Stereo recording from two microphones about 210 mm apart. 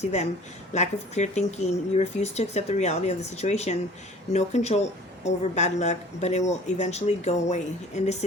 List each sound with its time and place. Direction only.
0.0 s speech: 30° left (ahead or behind)